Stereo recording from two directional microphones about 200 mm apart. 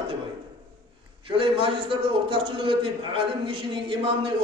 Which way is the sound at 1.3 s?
25° right (ahead or behind).